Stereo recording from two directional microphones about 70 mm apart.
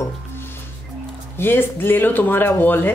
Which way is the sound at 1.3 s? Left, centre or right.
Left.